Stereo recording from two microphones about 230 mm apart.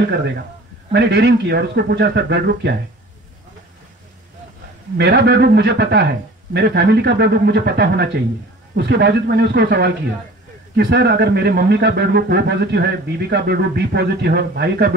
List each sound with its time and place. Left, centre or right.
0.9 s speech: right
4.9 s speech: right